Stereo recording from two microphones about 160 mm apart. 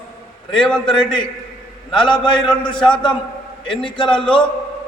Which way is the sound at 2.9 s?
30° left (ahead or behind).